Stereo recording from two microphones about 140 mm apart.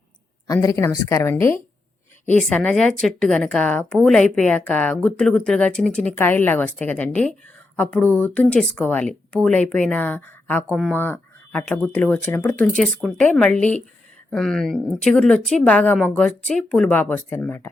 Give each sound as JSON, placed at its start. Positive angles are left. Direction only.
{"t": 0.4, "sound": "a woman's voice", "side_deg": 25}
{"t": 2.4, "sound": "a woman's voice", "side_deg": 10}